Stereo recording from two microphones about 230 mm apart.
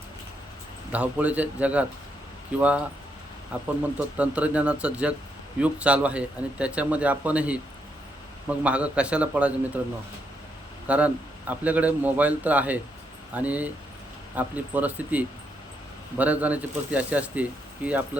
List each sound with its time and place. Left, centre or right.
0.9 s a man's voice: centre
10.8 s a man's voice: centre